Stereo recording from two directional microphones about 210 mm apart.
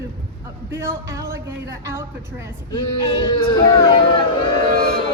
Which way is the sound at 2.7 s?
20° left (ahead or behind).